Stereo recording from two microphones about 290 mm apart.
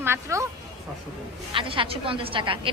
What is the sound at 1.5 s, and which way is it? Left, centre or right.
A woman's voice, centre.